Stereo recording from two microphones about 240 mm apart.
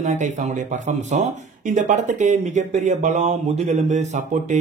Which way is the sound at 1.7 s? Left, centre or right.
Right.